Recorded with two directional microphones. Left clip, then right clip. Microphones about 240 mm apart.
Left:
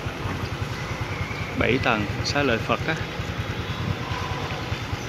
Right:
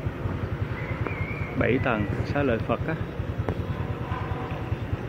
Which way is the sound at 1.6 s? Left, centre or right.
Centre.